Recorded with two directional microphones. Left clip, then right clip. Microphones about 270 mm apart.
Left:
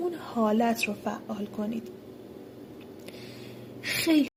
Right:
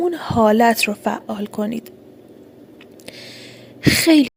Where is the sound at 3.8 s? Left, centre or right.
Right.